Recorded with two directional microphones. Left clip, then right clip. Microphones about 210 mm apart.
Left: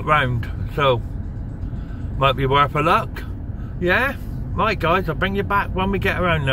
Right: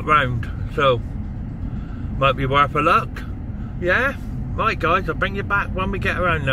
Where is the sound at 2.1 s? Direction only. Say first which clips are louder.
Even; centre (ahead or behind).